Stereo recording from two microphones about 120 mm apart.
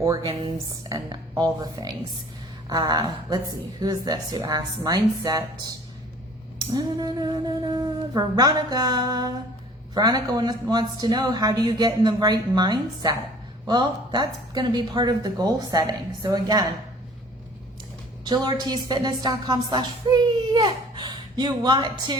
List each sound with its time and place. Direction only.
0.0 s a woman's voice: 30° right (ahead or behind)
6.6 s a sound: 35° right (ahead or behind)
7.7 s a woman's voice: 30° right (ahead or behind)
18.3 s a woman's voice: 35° right (ahead or behind)